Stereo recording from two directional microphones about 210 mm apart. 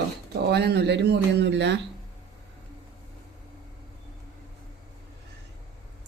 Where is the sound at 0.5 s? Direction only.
50° right (ahead or behind).